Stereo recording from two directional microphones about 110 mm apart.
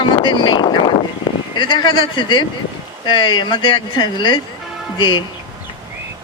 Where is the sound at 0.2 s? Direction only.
45° left (ahead or behind).